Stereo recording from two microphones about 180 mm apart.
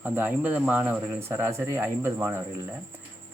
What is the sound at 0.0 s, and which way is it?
Speech, 10° right (ahead or behind).